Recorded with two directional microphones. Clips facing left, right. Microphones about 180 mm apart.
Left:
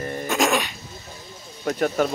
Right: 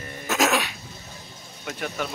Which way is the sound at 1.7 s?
45° left (ahead or behind).